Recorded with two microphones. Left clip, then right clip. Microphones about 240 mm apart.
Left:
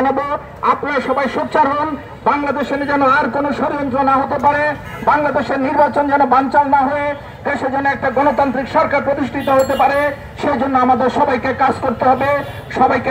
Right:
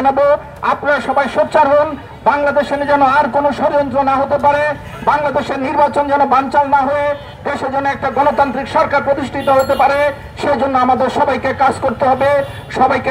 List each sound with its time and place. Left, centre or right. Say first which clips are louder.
0.0 s a man's voice: right 5 dB; right